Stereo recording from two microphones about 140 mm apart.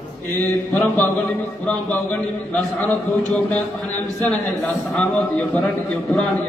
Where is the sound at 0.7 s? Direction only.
10° left (ahead or behind).